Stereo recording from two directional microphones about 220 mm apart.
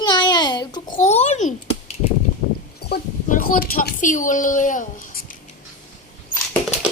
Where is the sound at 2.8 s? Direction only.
45° left (ahead or behind).